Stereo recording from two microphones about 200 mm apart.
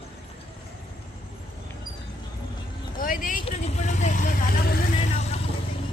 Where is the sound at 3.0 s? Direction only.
45° left (ahead or behind).